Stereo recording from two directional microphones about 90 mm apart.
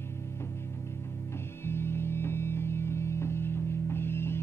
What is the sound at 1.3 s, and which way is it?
Music, 25° left (ahead or behind).